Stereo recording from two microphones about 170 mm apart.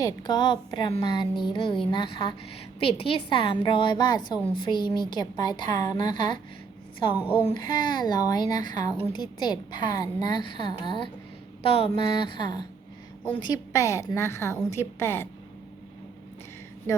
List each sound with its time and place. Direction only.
0.0 s a woman's voice: 25° left (ahead or behind)